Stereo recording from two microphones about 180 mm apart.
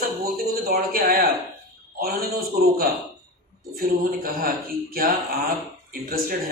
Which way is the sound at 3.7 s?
55° right (ahead or behind).